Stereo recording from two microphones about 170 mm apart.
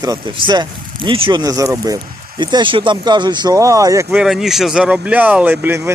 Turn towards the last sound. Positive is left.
turn(degrees=-15)  # may be behind; listen again after turning